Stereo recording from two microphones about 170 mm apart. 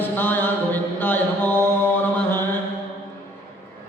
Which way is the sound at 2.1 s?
15° left (ahead or behind).